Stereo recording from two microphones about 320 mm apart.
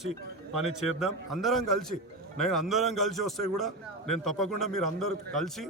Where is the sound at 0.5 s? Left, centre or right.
Centre.